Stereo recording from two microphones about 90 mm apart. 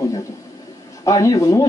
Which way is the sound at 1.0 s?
40° left (ahead or behind).